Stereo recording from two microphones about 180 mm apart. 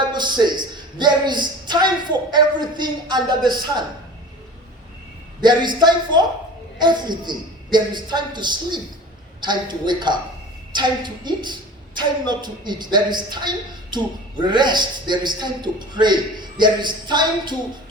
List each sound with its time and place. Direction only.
0.0 s a woman's voice: 25° right (ahead or behind)
5.4 s a woman's voice: 25° right (ahead or behind)